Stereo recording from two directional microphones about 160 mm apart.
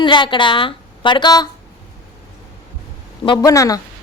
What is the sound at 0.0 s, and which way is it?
A woman's voice, 30° left (ahead or behind).